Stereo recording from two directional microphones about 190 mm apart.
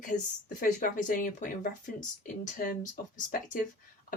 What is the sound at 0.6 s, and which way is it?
Speech, 45° left (ahead or behind).